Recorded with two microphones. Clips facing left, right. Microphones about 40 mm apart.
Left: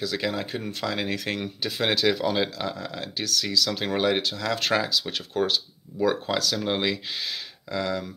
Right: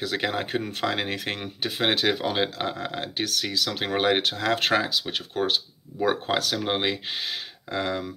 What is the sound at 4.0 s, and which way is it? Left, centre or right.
Speech, right.